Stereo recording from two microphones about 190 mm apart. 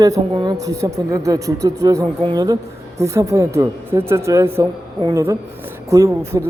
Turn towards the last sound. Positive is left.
turn(degrees=-15)  # may be behind; listen again after turning